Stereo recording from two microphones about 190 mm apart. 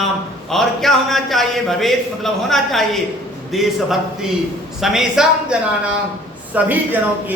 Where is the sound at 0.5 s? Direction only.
Centre (ahead or behind).